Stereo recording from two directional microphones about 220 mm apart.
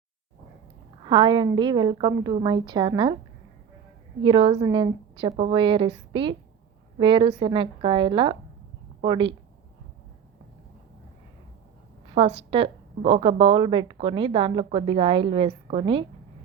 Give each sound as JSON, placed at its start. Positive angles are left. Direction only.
{"t": 1.0, "sound": "a woman's voice", "side_deg": -20}
{"t": 4.2, "sound": "a woman's voice", "side_deg": -20}
{"t": 12.5, "sound": "a woman's voice", "side_deg": -25}